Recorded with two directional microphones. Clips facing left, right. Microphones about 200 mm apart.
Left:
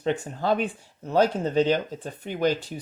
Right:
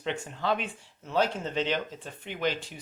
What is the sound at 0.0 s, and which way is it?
Speech, 40° left (ahead or behind).